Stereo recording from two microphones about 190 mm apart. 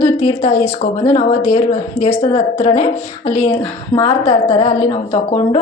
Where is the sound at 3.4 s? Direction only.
15° left (ahead or behind).